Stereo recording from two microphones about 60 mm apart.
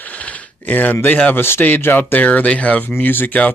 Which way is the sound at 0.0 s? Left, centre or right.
Left.